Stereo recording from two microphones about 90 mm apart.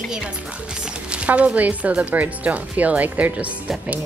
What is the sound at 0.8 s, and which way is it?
Speech, 10° right (ahead or behind).